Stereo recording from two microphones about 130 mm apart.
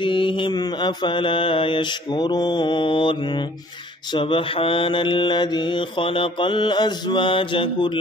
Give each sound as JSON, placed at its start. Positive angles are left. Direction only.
{"t": 0.0, "sound": "mantra", "side_deg": 40}